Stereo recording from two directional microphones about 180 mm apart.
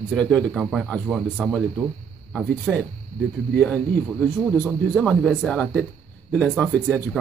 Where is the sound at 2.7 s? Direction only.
5° right (ahead or behind).